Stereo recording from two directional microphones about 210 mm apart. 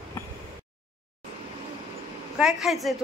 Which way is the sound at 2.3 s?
Centre (ahead or behind).